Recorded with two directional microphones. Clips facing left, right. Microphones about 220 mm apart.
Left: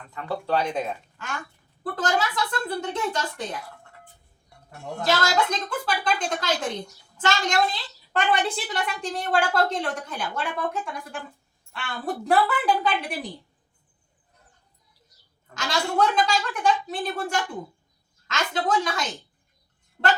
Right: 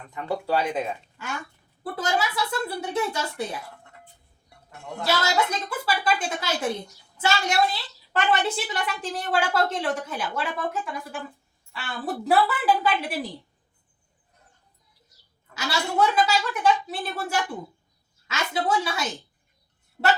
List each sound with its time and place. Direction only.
0.1 s a woman's voice: 15° right (ahead or behind)
5.0 s a woman's voice: 10° right (ahead or behind)
15.5 s a woman's voice: 5° right (ahead or behind)
20.0 s speech: 20° right (ahead or behind)